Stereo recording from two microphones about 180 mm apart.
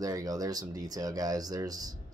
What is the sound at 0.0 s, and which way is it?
Speech, 20° right (ahead or behind).